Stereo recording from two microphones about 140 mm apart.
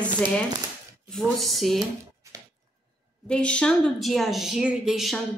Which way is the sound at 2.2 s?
20° right (ahead or behind).